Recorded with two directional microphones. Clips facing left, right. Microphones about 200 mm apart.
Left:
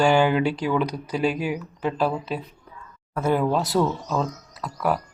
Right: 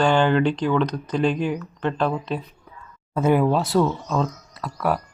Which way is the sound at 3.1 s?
20° right (ahead or behind).